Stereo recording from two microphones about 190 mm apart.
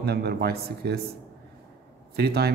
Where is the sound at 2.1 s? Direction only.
55° right (ahead or behind).